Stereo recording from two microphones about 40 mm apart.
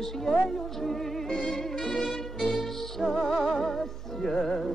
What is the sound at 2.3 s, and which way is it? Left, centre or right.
Music, centre.